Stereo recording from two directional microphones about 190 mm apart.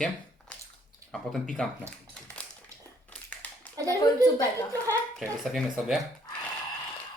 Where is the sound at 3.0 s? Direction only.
5° left (ahead or behind).